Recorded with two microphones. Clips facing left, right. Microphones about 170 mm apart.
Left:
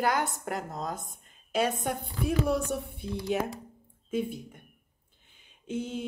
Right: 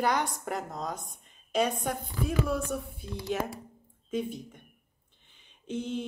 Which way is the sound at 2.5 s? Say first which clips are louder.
Left 3 dB; 75° left (ahead or behind).